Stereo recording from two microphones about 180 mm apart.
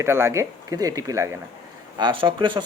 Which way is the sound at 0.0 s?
15° right (ahead or behind).